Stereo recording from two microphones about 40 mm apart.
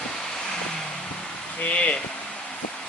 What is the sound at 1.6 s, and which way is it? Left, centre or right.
Speech, left.